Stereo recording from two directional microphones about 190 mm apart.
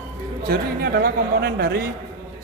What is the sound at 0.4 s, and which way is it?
A man's voice, 55° right (ahead or behind).